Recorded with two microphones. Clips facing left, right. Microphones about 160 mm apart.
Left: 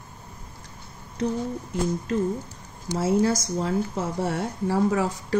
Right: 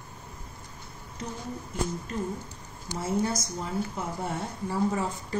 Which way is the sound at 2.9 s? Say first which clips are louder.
Left 7 dB; 90° left.